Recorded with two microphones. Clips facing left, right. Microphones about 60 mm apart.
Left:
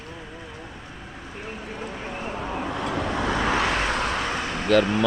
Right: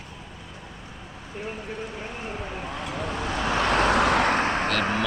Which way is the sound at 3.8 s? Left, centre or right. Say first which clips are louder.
Right 5 dB; right.